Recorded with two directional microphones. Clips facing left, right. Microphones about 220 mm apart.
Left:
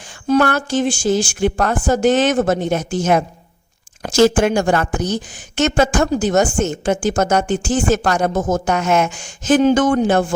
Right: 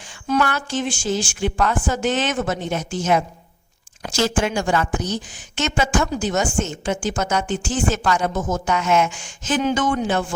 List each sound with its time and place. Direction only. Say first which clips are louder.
0.3 s speech: left 6 dB; 45° left (ahead or behind)